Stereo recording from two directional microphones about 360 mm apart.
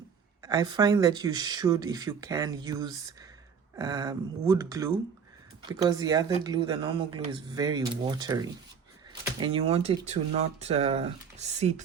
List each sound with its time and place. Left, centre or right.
0.4 s speech: centre